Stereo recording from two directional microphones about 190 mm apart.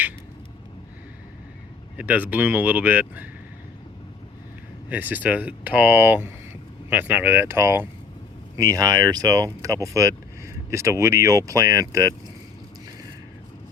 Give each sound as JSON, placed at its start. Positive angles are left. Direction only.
{"t": 2.0, "sound": "speech", "side_deg": -10}
{"t": 4.9, "sound": "speech", "side_deg": -10}